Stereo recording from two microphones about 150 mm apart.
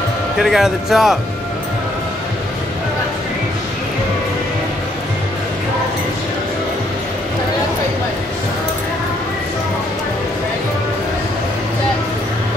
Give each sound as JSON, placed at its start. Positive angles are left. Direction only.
{"t": 0.4, "sound": "speech", "side_deg": 0}